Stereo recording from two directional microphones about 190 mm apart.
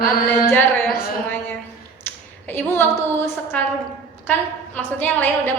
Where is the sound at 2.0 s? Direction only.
10° left (ahead or behind).